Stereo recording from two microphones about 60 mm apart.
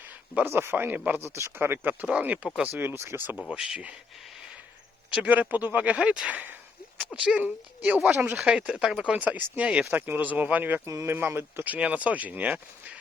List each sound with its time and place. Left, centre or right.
0.4 s speech: right
1.2 s speech: right
2.0 s speech: right
2.7 s speech: right
3.5 s speech: right
5.3 s speech: right
7.4 s speech: right
8.4 s speech: centre
9.9 s speech: right
11.0 s speech: right
11.7 s speech: right